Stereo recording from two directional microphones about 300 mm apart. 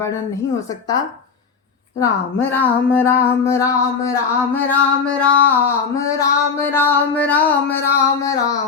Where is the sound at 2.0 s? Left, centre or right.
Centre.